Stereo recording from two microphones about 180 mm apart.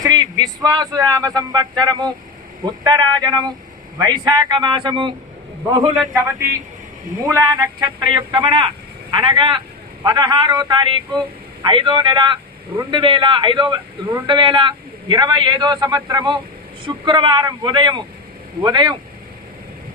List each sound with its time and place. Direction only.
0.0 s a man's voice: 20° right (ahead or behind)
6.1 s a man's voice: 15° right (ahead or behind)